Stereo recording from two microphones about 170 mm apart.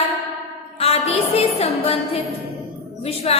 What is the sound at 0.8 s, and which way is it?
Music, 35° left (ahead or behind).